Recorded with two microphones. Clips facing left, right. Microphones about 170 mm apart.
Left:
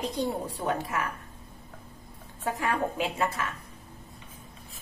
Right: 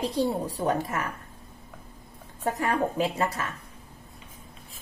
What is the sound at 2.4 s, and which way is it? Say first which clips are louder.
Speech: right 3 dB; 35° right (ahead or behind).